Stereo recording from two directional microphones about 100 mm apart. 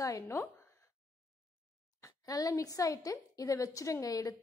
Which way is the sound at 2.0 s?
35° left (ahead or behind).